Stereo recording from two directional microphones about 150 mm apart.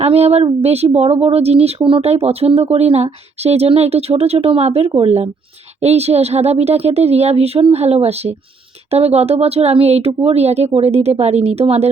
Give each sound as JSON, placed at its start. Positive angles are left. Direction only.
{"t": 0.0, "sound": "speech", "side_deg": -45}